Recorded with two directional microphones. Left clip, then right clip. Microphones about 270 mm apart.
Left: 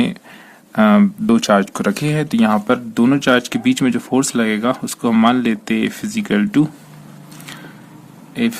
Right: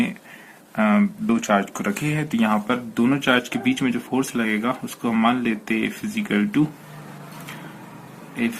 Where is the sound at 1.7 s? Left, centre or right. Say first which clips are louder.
Left 6 dB; left.